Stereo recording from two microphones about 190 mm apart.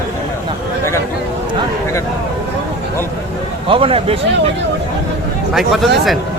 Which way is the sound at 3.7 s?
30° right (ahead or behind).